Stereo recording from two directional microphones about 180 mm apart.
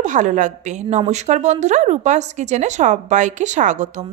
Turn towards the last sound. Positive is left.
turn(degrees=-40)  # may be behind; listen again after turning